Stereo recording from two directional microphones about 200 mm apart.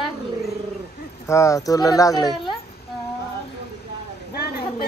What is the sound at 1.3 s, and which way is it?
A man's voice, 15° left (ahead or behind).